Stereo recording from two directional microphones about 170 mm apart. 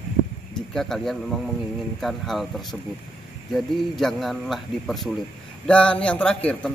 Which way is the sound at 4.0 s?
Centre (ahead or behind).